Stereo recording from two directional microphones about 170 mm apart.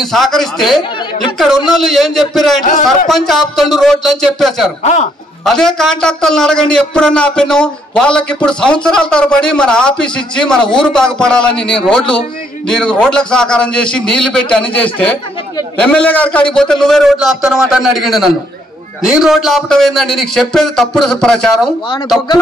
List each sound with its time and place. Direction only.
0.0 s a man's voice: centre (ahead or behind)
2.6 s a man's voice: 50° left (ahead or behind)
3.1 s a man's voice: centre (ahead or behind)
4.8 s a man's voice: 40° left (ahead or behind)
5.4 s a man's voice: centre (ahead or behind)